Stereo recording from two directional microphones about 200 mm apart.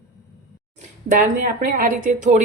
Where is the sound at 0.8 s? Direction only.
40° right (ahead or behind).